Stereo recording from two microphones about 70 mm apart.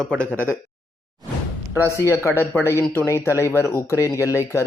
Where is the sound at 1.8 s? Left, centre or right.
Left.